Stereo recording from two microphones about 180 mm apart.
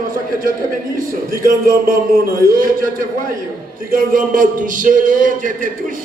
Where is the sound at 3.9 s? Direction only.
50° right (ahead or behind).